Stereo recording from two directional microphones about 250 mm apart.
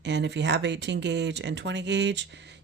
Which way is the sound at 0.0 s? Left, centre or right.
Right.